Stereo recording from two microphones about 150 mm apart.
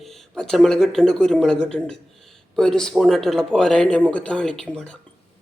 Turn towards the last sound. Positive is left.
turn(degrees=5)  # may be behind; listen again after turning